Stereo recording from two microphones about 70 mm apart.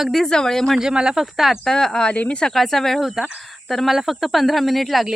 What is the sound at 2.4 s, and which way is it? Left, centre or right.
Speech, centre.